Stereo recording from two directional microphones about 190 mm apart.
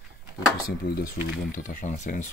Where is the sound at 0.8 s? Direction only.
50° left (ahead or behind).